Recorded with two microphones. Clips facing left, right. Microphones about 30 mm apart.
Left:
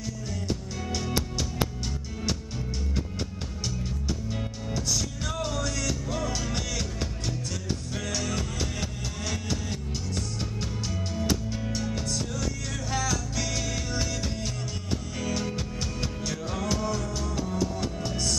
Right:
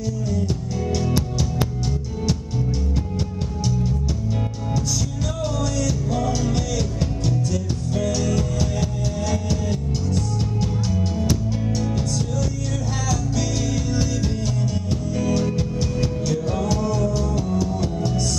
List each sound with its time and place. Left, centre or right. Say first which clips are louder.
5.6 s music: right 6 dB; left
6.0 s music: right 7 dB; centre
7.9 s music: right 10 dB; centre
10.6 s music: right 9 dB; centre
13.1 s music: right 6 dB; centre
15.1 s music: right 10 dB; centre